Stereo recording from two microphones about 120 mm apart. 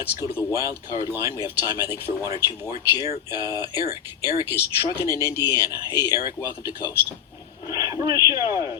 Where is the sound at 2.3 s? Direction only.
55° left (ahead or behind).